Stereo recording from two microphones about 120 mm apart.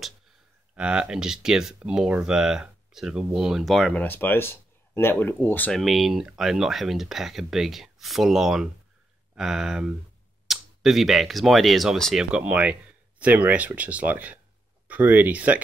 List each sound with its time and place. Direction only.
0.7 s speech: 10° right (ahead or behind)
3.9 s speech: 15° left (ahead or behind)
5.7 s speech: centre (ahead or behind)